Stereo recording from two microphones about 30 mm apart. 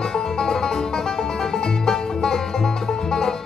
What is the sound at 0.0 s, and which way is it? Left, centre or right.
Music, centre.